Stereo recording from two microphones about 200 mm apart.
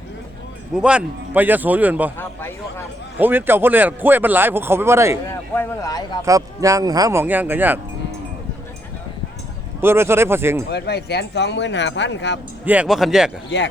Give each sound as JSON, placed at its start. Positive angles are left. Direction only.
{"t": 0.8, "sound": "speech", "side_deg": -5}
{"t": 2.1, "sound": "speech", "side_deg": 10}
{"t": 3.2, "sound": "speech", "side_deg": -10}
{"t": 5.5, "sound": "speech", "side_deg": 20}
{"t": 6.2, "sound": "speech", "side_deg": -15}
{"t": 9.8, "sound": "speech", "side_deg": -10}
{"t": 10.7, "sound": "speech", "side_deg": 55}
{"t": 12.6, "sound": "speech", "side_deg": -5}